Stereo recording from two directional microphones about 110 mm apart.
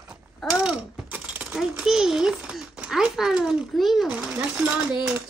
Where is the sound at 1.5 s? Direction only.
5° right (ahead or behind).